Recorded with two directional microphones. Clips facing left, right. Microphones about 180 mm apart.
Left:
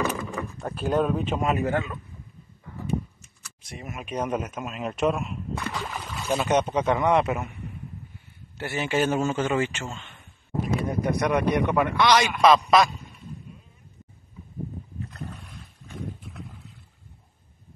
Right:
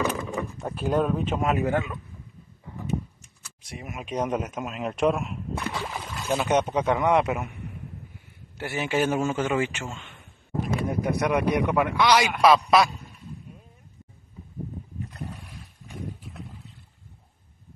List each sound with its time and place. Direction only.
0.0 s vehicle: 15° right (ahead or behind)
0.6 s a man's voice: centre (ahead or behind)
1.6 s speech: 15° right (ahead or behind)
3.6 s speech: 15° right (ahead or behind)
4.6 s a man's voice: centre (ahead or behind)
5.6 s a sound: 15° right (ahead or behind)
6.1 s speech: centre (ahead or behind)
8.5 s speech: 15° right (ahead or behind)
10.9 s a man's voice: centre (ahead or behind)